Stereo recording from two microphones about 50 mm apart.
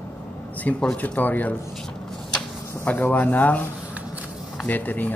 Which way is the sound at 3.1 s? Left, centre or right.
Left.